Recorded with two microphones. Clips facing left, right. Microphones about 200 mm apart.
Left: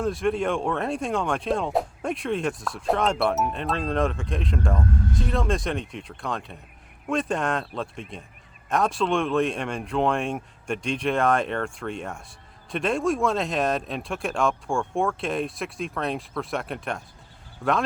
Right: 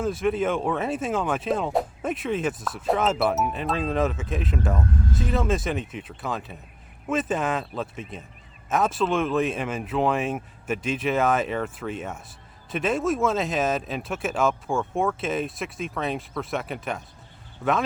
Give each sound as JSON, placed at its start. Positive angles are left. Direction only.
{"t": 0.0, "sound": "speech", "side_deg": 0}